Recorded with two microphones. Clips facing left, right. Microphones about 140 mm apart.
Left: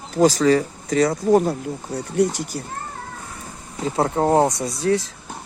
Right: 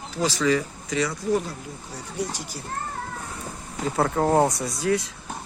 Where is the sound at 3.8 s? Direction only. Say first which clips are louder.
Left 3 dB; 30° left (ahead or behind).